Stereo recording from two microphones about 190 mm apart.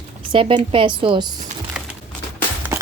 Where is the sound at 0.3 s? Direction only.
30° right (ahead or behind).